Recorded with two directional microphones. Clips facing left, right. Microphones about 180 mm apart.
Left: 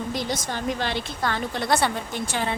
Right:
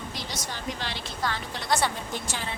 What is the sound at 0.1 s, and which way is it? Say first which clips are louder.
A woman's voice: left 8 dB; 50° left (ahead or behind).